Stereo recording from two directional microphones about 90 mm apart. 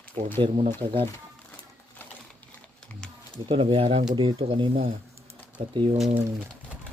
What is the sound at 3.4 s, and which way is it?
Speech, 85° right.